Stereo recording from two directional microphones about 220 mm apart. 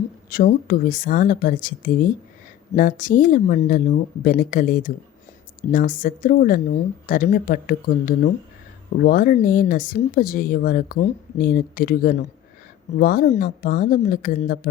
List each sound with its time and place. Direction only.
0.3 s speech: 40° left (ahead or behind)